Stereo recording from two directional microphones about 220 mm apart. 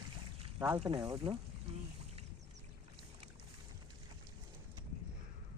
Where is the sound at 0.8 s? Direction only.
20° right (ahead or behind).